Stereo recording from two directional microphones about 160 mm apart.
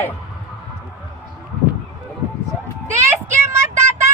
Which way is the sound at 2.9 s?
15° right (ahead or behind).